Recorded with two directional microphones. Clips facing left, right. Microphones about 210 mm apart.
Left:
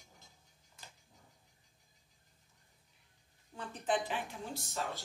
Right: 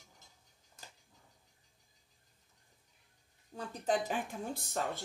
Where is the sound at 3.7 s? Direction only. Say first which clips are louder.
Right 2 dB; 40° right (ahead or behind).